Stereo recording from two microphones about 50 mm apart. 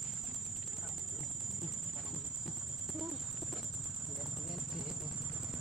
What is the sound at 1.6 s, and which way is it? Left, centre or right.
Music, centre.